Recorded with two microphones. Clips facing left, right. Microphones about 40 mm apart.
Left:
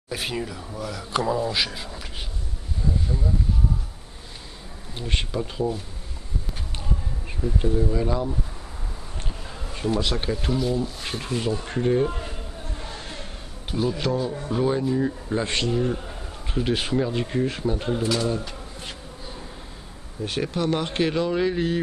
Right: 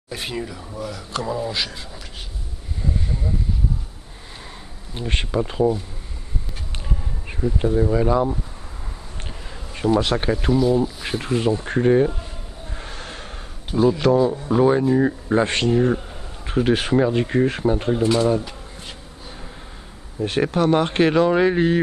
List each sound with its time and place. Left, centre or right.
0.1 s speech: centre
5.1 s speech: right
7.2 s speech: centre
9.9 s speech: right
10.2 s speech: centre
13.0 s gasp: right
13.7 s speech: centre
14.5 s speech: centre
15.0 s speech: right
16.4 s speech: right
20.2 s speech: right